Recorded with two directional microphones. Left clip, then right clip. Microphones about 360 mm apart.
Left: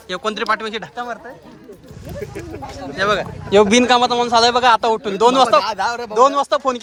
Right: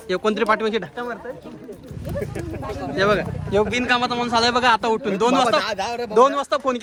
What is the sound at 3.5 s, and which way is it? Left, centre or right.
A man's voice, left.